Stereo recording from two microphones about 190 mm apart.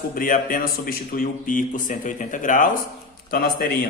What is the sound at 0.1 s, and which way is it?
A man's voice, 45° left (ahead or behind).